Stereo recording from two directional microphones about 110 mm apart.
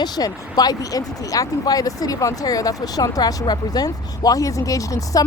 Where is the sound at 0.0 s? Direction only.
35° left (ahead or behind).